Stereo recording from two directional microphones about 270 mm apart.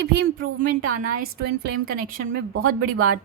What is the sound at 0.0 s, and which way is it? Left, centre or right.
A woman's voice, right.